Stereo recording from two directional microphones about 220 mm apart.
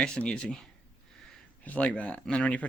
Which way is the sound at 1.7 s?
5° left (ahead or behind).